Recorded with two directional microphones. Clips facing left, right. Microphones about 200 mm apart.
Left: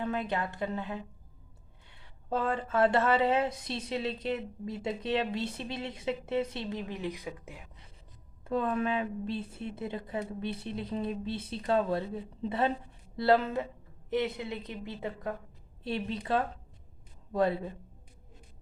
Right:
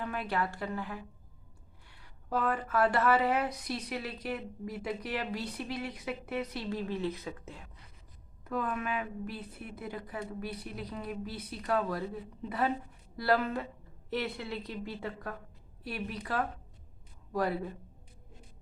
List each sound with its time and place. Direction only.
0.0 s speech: 20° left (ahead or behind)
8.4 s speech: 25° left (ahead or behind)